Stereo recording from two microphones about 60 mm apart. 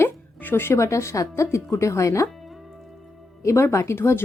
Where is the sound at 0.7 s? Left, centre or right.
Left.